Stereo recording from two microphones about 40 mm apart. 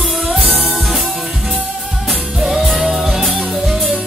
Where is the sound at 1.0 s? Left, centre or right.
Centre.